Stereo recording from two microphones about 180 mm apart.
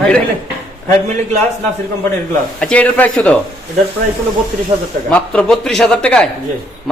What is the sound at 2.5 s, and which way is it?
Speech, 5° left (ahead or behind).